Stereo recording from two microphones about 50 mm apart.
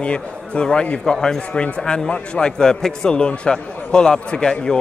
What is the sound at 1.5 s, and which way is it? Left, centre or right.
Speech, left.